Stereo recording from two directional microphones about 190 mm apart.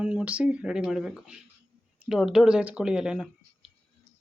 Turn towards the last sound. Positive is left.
turn(degrees=-5)  # may be behind; listen again after turning